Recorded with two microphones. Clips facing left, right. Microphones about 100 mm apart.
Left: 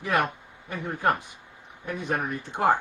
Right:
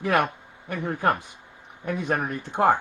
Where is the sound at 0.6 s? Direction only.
65° right (ahead or behind).